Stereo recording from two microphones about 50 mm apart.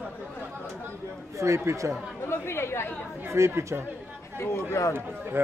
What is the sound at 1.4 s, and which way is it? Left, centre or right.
Speech, right.